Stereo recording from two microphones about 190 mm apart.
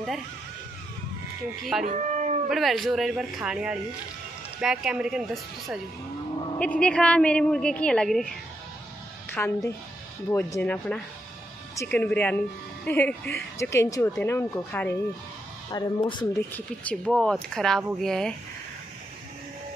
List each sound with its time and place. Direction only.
1.9 s cat: 40° right (ahead or behind)
2.5 s speech: centre (ahead or behind)
9.3 s speech: 10° left (ahead or behind)
16.5 s speech: 5° left (ahead or behind)